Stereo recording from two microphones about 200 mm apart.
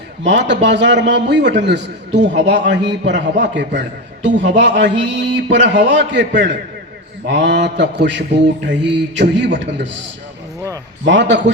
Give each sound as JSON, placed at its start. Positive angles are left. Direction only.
{"t": 0.3, "sound": "a man's voice", "side_deg": -60}
{"t": 11.0, "sound": "a man's voice", "side_deg": -60}